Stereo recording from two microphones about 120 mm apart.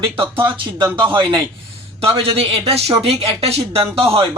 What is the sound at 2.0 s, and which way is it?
A man's voice, 55° right (ahead or behind).